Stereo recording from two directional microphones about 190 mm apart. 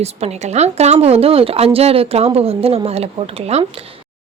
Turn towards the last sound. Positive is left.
turn(degrees=-30)  # may be behind; listen again after turning